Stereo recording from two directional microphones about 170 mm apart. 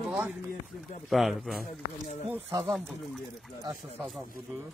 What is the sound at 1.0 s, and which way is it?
Speech, centre (ahead or behind).